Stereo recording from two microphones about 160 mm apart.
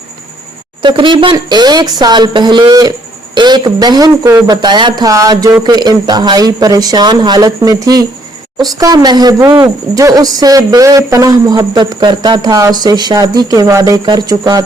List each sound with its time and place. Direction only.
0.8 s speech: 30° right (ahead or behind)